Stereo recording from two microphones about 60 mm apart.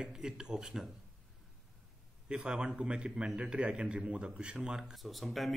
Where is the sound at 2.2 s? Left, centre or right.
Centre.